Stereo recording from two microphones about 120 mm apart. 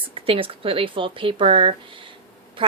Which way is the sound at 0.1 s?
50° right (ahead or behind).